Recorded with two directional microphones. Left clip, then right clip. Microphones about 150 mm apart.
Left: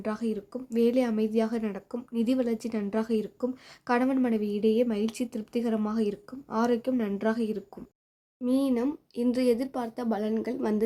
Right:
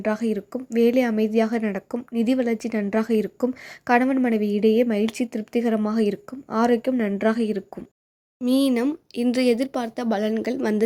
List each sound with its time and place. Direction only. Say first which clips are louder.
0.0 s a woman's voice: right 8 dB; 25° right (ahead or behind)